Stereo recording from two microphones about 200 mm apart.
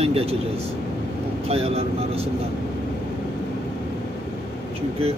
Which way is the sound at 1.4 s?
30° right (ahead or behind).